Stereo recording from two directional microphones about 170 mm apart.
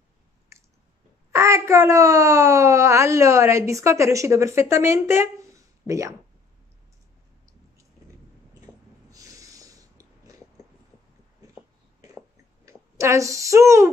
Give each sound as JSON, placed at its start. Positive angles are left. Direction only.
{"t": 1.3, "sound": "speech", "side_deg": -15}
{"t": 9.1, "sound": "snort", "side_deg": -20}
{"t": 12.6, "sound": "speech", "side_deg": -15}